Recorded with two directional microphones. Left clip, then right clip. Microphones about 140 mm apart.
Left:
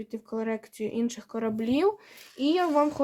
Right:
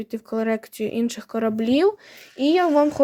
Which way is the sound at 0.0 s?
30° right (ahead or behind).